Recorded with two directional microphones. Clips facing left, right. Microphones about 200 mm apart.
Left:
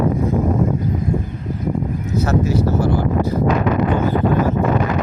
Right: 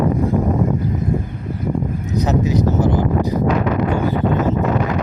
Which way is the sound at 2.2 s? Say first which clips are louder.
Right 1 dB; 15° right (ahead or behind).